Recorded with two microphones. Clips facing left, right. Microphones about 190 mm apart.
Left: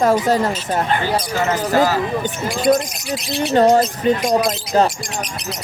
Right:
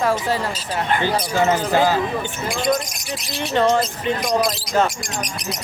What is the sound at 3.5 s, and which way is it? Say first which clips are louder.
Speech: left 4 dB; 40° left (ahead or behind).